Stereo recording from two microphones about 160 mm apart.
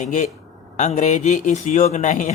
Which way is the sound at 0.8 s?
50° left (ahead or behind).